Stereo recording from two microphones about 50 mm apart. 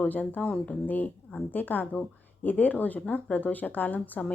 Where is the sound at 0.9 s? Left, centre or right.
Left.